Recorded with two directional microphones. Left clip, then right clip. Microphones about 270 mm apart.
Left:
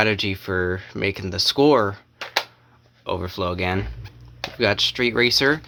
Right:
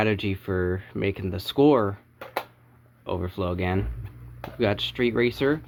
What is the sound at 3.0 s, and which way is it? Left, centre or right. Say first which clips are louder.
Speech: left 4 dB; centre.